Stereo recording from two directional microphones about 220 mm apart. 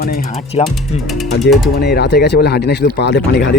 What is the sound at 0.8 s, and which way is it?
Speech, centre (ahead or behind).